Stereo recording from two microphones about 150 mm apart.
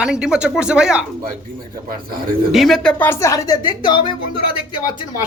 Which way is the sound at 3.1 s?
20° left (ahead or behind).